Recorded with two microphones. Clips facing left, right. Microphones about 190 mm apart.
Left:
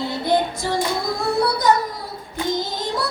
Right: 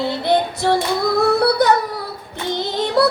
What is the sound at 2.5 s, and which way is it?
Child singing, 65° right (ahead or behind).